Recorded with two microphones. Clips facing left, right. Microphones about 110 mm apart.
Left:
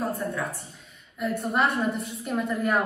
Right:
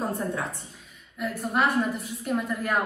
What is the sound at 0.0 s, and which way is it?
Speech, 25° right (ahead or behind).